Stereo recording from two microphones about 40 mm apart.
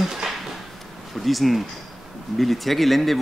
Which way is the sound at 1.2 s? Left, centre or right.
Centre.